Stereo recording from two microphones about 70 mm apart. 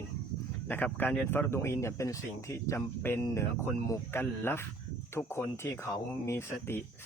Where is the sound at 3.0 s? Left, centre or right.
Left.